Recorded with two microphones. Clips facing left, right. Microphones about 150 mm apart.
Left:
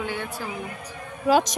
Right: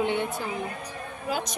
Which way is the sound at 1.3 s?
90° left.